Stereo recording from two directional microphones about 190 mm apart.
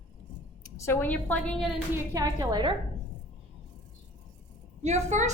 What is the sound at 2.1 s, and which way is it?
Speech, 20° right (ahead or behind).